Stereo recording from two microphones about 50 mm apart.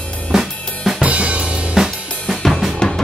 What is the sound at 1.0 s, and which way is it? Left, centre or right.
Music, right.